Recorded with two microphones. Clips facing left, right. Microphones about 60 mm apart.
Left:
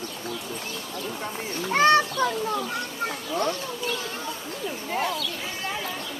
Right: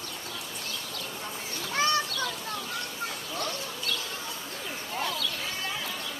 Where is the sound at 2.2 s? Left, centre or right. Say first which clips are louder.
Left 9 dB; left.